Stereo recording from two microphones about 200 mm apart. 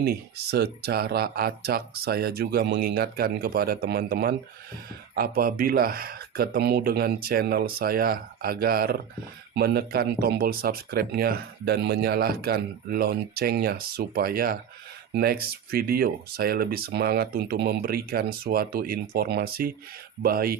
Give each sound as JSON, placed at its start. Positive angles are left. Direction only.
{"t": 0.0, "sound": "speech", "side_deg": -50}